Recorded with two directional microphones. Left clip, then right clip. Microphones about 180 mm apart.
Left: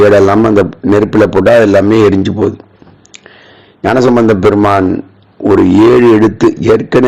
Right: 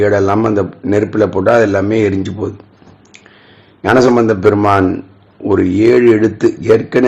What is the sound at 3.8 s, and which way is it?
A man's voice, 35° left (ahead or behind).